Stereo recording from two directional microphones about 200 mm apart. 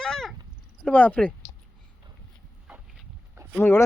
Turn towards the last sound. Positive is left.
turn(degrees=10)  # may be behind; listen again after turning